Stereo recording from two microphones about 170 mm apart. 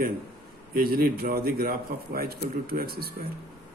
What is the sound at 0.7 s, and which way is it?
A man's voice, 60° right (ahead or behind).